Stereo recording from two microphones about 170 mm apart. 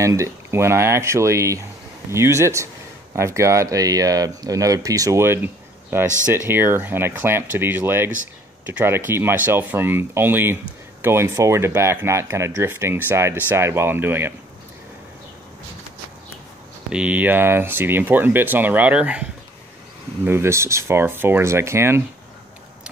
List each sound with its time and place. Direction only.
0.0 s speech: 20° right (ahead or behind)
16.9 s speech: 5° right (ahead or behind)
20.2 s speech: 15° right (ahead or behind)